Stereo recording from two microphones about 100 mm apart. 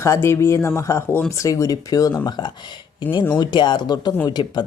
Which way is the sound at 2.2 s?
45° left (ahead or behind).